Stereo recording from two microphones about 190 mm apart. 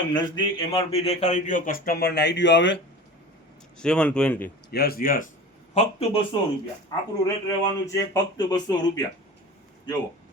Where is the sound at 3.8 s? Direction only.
5° left (ahead or behind).